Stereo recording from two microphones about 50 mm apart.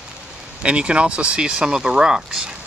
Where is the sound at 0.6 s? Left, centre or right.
Right.